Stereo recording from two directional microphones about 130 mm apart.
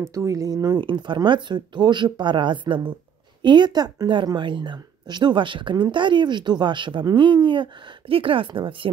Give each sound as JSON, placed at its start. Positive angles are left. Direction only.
{"t": 0.0, "sound": "speech", "side_deg": -25}